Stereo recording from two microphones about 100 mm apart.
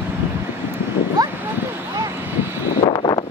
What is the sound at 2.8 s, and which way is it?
Wind, 45° left (ahead or behind).